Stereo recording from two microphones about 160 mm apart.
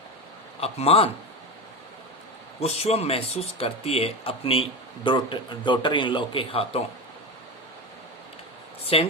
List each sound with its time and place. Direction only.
0.6 s speech: 40° left (ahead or behind)
2.6 s a man's voice: 40° left (ahead or behind)
8.9 s speech: 35° left (ahead or behind)